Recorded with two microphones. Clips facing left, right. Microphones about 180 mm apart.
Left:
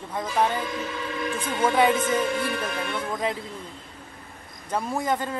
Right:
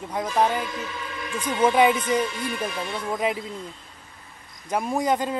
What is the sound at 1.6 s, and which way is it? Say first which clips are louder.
Speech: right 2 dB; 20° right (ahead or behind).